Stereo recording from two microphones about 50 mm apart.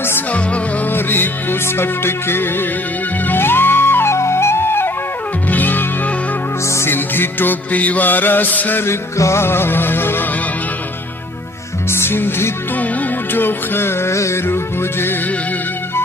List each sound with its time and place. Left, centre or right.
0.9 s music: left
5.5 s music: left
6.9 s music: left
8.8 s music: left
11.9 s music: left
14.1 s music: left
14.5 s music: left